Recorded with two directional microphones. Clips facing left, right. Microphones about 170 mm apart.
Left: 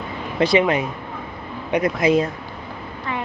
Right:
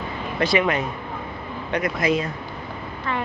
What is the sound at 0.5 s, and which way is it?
A woman's voice, 20° left (ahead or behind).